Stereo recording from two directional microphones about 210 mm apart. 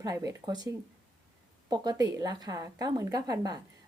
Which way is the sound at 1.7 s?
20° right (ahead or behind).